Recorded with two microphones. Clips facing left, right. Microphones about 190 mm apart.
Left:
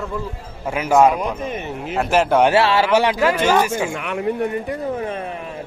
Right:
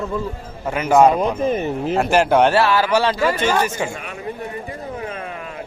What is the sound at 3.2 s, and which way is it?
Speech, 5° left (ahead or behind).